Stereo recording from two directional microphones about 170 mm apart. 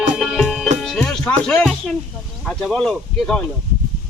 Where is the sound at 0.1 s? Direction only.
Centre (ahead or behind).